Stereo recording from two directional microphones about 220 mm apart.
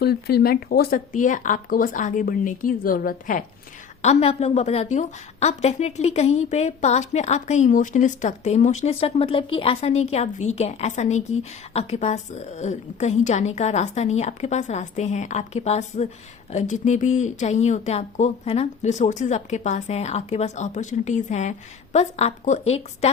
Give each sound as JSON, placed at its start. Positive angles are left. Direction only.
{"t": 0.0, "sound": "a woman's voice", "side_deg": 45}